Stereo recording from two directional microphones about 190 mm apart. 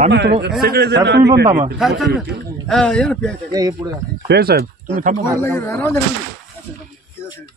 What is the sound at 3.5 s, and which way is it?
Speech, 20° right (ahead or behind).